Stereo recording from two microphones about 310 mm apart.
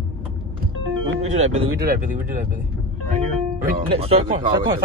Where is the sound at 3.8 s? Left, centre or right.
Centre.